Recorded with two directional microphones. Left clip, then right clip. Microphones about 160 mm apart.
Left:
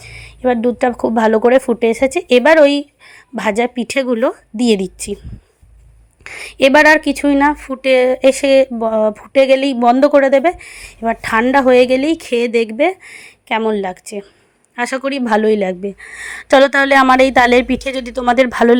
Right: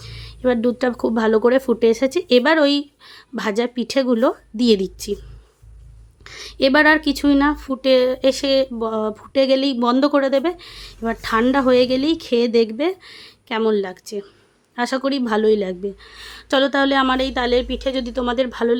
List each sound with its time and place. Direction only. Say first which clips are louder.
0.0 s speech: left 4 dB; 15° left (ahead or behind)
6.2 s a woman's voice: left 6 dB; 25° left (ahead or behind)